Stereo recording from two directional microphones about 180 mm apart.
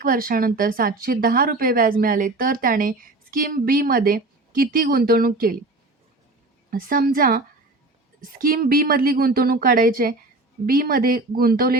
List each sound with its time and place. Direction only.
0.0 s a woman's voice: 50° right (ahead or behind)
6.7 s a woman's voice: 55° right (ahead or behind)